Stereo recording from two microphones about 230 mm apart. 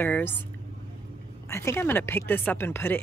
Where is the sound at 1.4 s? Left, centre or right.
Centre.